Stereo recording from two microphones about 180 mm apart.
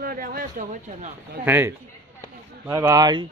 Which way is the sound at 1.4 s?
10° right (ahead or behind).